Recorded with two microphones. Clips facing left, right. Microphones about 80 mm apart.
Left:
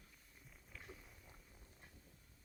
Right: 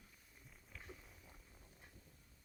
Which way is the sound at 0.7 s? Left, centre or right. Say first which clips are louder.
Even; centre.